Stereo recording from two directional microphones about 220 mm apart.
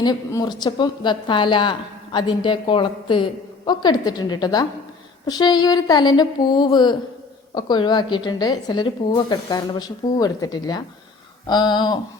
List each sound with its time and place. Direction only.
0.0 s a woman's voice: 15° left (ahead or behind)